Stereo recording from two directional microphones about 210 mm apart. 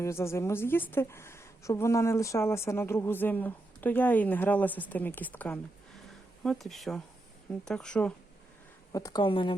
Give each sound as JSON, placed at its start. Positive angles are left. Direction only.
{"t": 0.0, "sound": "a woman's voice", "side_deg": 10}
{"t": 8.9, "sound": "speech", "side_deg": 15}